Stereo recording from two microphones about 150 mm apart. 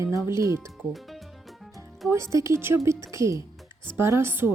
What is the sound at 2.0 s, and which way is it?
A woman's voice, 20° right (ahead or behind).